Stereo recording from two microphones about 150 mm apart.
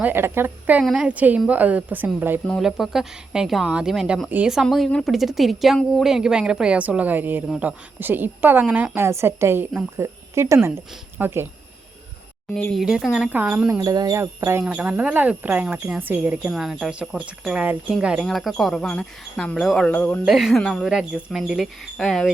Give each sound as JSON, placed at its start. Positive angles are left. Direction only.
{"t": 0.0, "sound": "a woman's voice", "side_deg": -15}
{"t": 12.5, "sound": "speech", "side_deg": 10}
{"t": 12.8, "sound": "a woman's voice", "side_deg": -5}
{"t": 13.7, "sound": "a woman's voice", "side_deg": -25}